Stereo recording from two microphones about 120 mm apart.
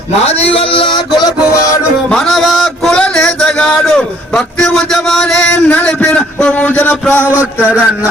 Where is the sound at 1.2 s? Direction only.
30° left (ahead or behind).